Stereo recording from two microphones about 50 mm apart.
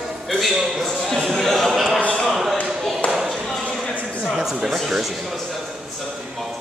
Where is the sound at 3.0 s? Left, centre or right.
Centre.